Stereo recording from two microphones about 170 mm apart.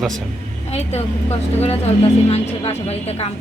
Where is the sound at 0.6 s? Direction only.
40° left (ahead or behind).